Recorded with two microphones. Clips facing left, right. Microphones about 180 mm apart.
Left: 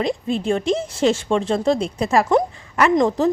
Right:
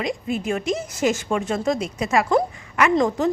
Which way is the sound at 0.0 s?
30° left (ahead or behind).